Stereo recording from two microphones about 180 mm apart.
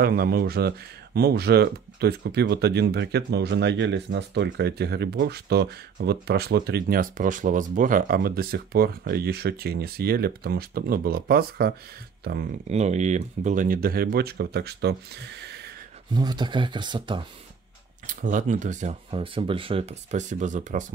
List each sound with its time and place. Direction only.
0.0 s speech: 55° right (ahead or behind)
12.6 s speech: 40° right (ahead or behind); by 15.7 s 65° right (ahead or behind)
16.1 s speech: 25° right (ahead or behind)
18.0 s speech: 45° right (ahead or behind)